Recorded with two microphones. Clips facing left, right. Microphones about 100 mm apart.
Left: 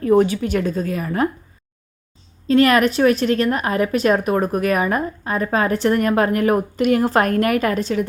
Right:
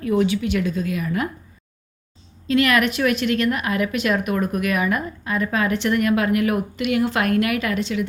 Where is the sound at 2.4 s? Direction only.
35° left (ahead or behind).